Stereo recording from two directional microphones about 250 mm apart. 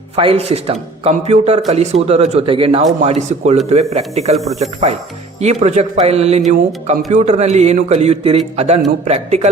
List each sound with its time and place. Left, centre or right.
0.2 s speech: right